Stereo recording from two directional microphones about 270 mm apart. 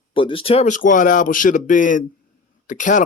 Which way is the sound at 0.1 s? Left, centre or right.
Centre.